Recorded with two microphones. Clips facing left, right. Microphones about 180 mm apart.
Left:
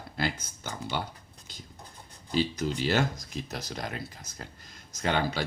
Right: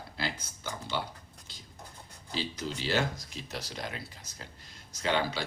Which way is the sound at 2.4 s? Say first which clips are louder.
Left 7 dB; 45° left (ahead or behind).